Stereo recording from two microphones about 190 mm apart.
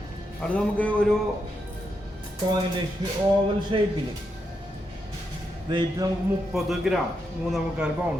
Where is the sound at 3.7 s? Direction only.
30° right (ahead or behind).